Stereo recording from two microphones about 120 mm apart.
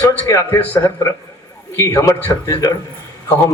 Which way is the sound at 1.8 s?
25° left (ahead or behind).